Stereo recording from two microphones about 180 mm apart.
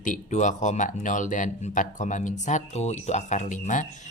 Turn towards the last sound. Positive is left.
turn(degrees=45)  # may be behind; listen again after turning